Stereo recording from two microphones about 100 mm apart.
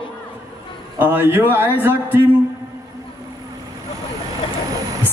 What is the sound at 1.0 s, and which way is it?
Speech, 20° right (ahead or behind).